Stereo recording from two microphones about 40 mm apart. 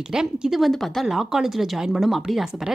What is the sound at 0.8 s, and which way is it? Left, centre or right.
Speech, centre.